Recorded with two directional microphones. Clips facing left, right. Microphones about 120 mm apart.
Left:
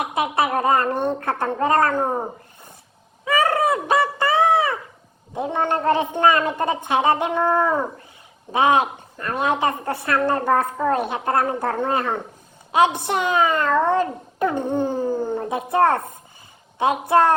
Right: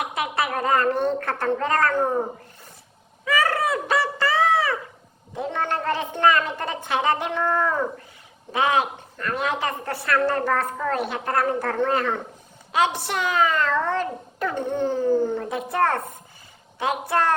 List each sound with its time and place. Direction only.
0.0 s a woman's voice: 20° left (ahead or behind)
3.2 s a sound: 20° left (ahead or behind)
5.3 s a woman's voice: 20° left (ahead or behind)